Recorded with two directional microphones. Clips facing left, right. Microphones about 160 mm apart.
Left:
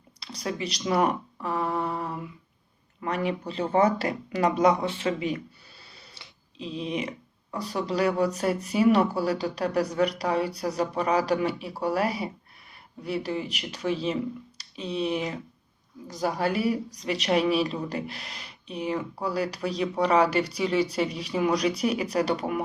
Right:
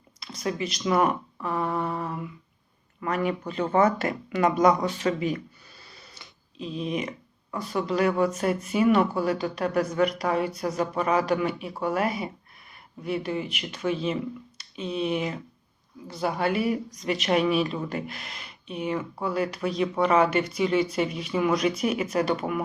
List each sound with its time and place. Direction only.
0.2 s speech: 35° left (ahead or behind)
5.9 s a sound: 30° left (ahead or behind)
6.7 s speech: 30° left (ahead or behind)